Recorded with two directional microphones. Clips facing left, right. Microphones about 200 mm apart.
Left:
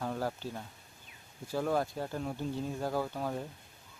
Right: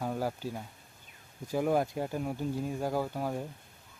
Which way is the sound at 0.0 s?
10° right (ahead or behind).